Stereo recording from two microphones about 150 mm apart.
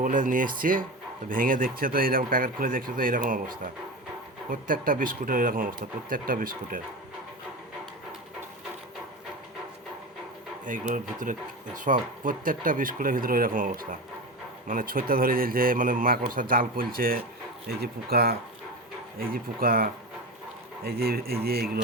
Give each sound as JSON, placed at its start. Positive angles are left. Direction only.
{"t": 0.0, "sound": "a man's voice", "side_deg": -65}
{"t": 10.7, "sound": "a man's voice", "side_deg": -60}
{"t": 17.7, "sound": "speech", "side_deg": -90}
{"t": 19.2, "sound": "a man's voice", "side_deg": -75}
{"t": 20.8, "sound": "speech", "side_deg": -90}